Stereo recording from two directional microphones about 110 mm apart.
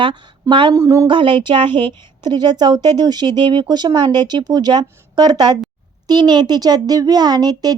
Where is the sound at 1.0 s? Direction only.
50° right (ahead or behind).